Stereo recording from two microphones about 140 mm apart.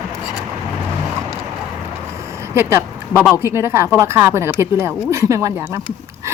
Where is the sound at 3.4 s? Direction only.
20° right (ahead or behind).